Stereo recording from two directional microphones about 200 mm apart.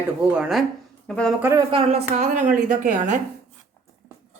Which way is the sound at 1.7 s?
30° right (ahead or behind).